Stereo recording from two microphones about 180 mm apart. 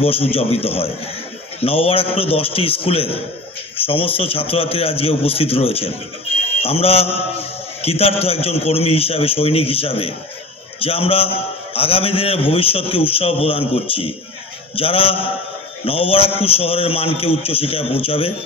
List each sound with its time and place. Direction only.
0.0 s a man's voice: 30° left (ahead or behind)